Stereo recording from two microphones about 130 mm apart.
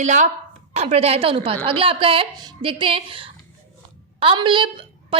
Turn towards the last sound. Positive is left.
turn(degrees=-40)  # may be behind; listen again after turning